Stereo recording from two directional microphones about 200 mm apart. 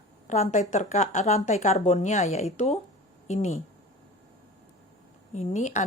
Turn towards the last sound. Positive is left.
turn(degrees=35)  # may be behind; listen again after turning